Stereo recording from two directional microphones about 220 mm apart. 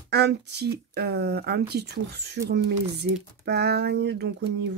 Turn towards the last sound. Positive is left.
turn(degrees=-50)  # may be behind; listen again after turning